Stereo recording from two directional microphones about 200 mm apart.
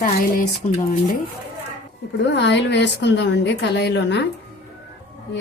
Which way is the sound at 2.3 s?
60° left (ahead or behind).